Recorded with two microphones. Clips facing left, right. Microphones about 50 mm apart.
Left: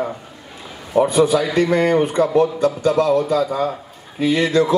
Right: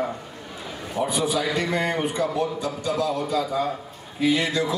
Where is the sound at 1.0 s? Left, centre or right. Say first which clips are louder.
Left 9 dB; left.